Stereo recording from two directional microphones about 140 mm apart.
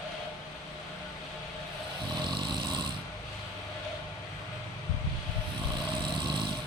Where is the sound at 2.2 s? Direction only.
35° right (ahead or behind).